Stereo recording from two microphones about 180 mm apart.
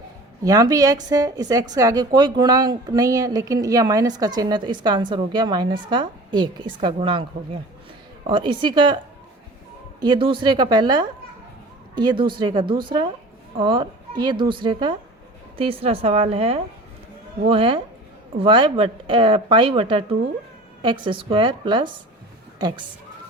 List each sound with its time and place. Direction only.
0.4 s a woman's voice: 20° right (ahead or behind)
8.3 s a woman's voice: 25° right (ahead or behind)
10.0 s a woman's voice: 25° right (ahead or behind)